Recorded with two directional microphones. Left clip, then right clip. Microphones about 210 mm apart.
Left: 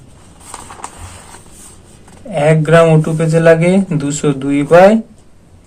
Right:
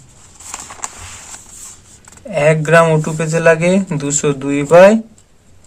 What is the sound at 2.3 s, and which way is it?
Speech, 25° right (ahead or behind).